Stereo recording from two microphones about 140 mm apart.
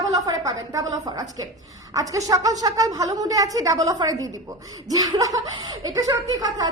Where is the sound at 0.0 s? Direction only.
25° right (ahead or behind).